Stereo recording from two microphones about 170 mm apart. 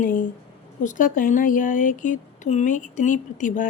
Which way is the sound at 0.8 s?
50° left (ahead or behind).